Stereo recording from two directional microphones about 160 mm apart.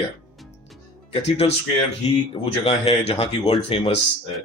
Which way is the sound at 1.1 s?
40° left (ahead or behind).